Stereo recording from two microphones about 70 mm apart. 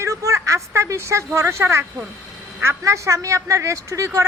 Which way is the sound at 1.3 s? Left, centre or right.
Right.